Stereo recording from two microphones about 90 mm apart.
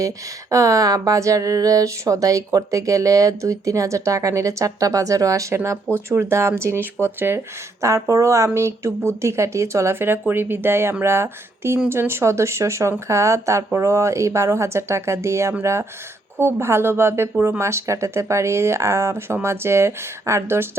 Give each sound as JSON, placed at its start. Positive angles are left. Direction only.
{"t": 0.5, "sound": "speech", "side_deg": -40}